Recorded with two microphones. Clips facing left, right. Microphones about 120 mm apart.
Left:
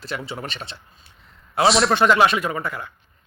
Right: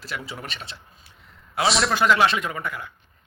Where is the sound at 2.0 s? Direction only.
35° left (ahead or behind).